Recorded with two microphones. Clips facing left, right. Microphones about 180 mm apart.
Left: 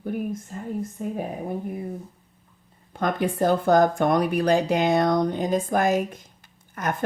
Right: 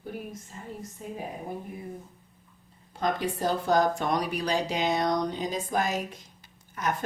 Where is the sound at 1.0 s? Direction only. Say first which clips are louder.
Left 7 dB; 55° left (ahead or behind).